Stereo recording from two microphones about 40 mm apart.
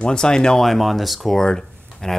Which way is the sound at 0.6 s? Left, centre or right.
Centre.